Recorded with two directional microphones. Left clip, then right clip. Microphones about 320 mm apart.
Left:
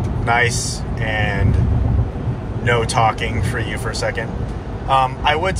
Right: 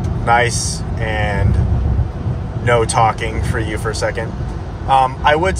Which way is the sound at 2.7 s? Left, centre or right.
Right.